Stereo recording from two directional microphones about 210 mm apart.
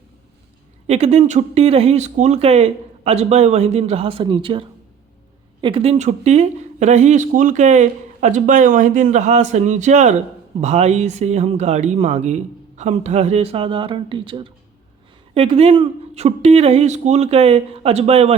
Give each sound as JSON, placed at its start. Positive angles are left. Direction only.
{"t": 0.9, "sound": "speech", "side_deg": -30}
{"t": 5.6, "sound": "speech", "side_deg": -25}